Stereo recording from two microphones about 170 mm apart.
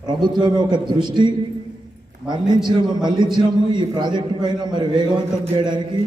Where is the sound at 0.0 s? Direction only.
25° right (ahead or behind).